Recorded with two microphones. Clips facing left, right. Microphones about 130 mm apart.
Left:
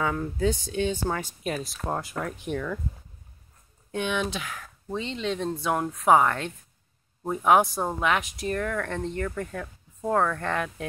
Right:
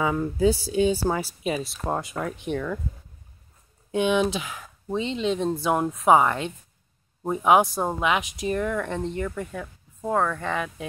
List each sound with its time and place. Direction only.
0.0 s speech: 10° right (ahead or behind)
3.9 s speech: 15° right (ahead or behind)
7.6 s speech: centre (ahead or behind)
7.9 s speech: 15° right (ahead or behind)